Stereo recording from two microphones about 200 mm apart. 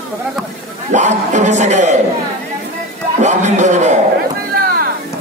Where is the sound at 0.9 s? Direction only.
35° right (ahead or behind).